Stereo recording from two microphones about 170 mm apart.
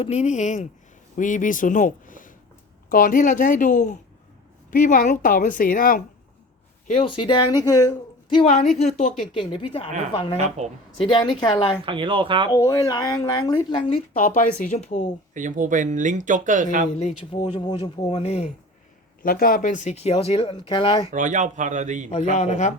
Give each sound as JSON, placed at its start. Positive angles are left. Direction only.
{"t": 0.0, "sound": "speech", "side_deg": 40}
{"t": 6.8, "sound": "speech", "side_deg": 35}
{"t": 8.4, "sound": "speech", "side_deg": 35}
{"t": 10.6, "sound": "speech", "side_deg": -40}
{"t": 11.0, "sound": "speech", "side_deg": 25}
{"t": 11.8, "sound": "speech", "side_deg": -30}
{"t": 12.5, "sound": "speech", "side_deg": 20}
{"t": 14.1, "sound": "speech", "side_deg": 50}
{"t": 15.4, "sound": "speech", "side_deg": -50}
{"t": 17.3, "sound": "speech", "side_deg": 25}
{"t": 18.2, "sound": "speech", "side_deg": 40}
{"t": 19.2, "sound": "speech", "side_deg": 60}
{"t": 21.1, "sound": "speech", "side_deg": -45}
{"t": 22.1, "sound": "speech", "side_deg": 40}